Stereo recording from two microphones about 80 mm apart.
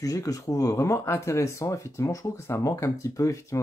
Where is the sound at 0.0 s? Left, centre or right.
Left.